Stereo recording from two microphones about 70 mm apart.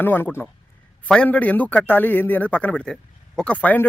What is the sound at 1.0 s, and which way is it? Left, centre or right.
A man's voice, centre.